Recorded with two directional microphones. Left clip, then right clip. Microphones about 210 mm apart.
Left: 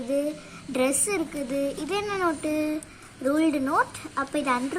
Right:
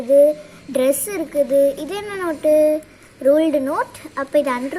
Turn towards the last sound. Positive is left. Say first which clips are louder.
# right 8 dB
turn(degrees=0)  # may be behind; listen again after turning